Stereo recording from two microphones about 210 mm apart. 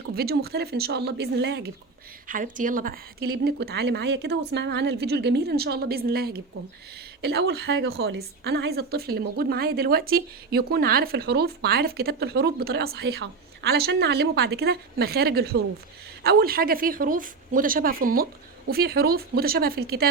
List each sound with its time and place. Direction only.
0.1 s a woman's voice: 45° right (ahead or behind)
2.2 s a woman's voice: 40° right (ahead or behind)